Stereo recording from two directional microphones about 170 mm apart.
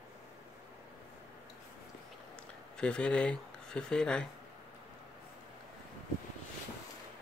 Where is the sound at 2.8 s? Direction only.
5° left (ahead or behind).